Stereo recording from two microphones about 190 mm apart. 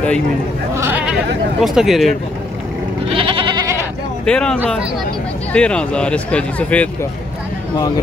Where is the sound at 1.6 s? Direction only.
Centre (ahead or behind).